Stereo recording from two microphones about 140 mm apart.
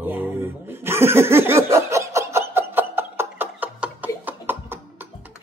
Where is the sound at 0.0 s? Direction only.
15° right (ahead or behind).